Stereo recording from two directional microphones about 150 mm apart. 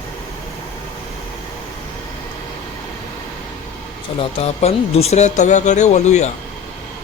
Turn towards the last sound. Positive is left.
turn(degrees=50)  # may be behind; listen again after turning